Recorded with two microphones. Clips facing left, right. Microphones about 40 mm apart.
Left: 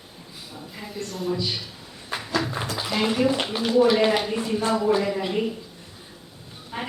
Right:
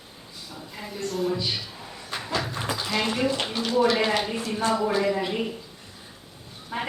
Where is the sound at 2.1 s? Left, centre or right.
Centre.